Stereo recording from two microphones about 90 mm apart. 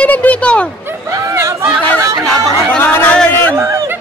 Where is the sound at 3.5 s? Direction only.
30° right (ahead or behind).